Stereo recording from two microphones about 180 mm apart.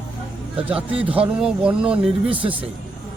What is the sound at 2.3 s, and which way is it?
Speech, 30° right (ahead or behind).